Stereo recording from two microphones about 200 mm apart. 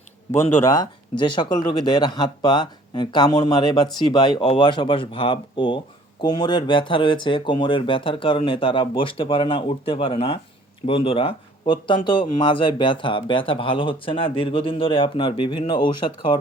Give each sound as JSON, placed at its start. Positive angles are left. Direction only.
{"t": 0.3, "sound": "speech", "side_deg": 15}